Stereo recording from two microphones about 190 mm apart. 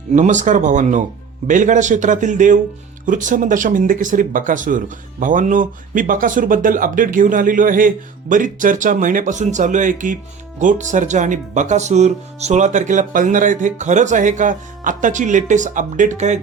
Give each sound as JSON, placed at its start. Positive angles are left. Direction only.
{"t": 0.1, "sound": "speech", "side_deg": -40}